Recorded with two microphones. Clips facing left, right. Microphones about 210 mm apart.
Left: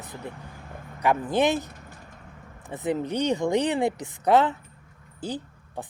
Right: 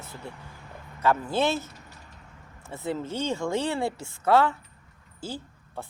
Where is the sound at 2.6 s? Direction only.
15° left (ahead or behind).